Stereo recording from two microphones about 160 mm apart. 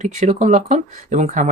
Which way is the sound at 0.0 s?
45° right (ahead or behind).